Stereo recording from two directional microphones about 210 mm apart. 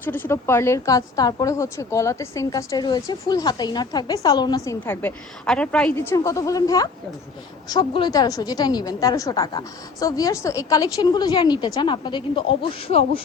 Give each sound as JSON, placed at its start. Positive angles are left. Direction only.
{"t": 0.0, "sound": "a woman's voice", "side_deg": 10}